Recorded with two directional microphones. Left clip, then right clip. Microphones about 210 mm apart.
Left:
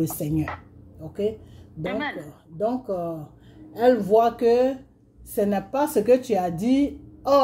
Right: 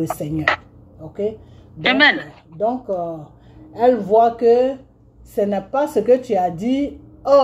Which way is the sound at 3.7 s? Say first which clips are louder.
Right 4 dB; 15° left (ahead or behind).